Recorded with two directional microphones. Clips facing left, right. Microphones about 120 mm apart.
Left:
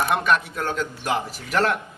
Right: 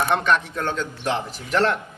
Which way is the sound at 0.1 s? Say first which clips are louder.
Right 1 dB; 5° left (ahead or behind).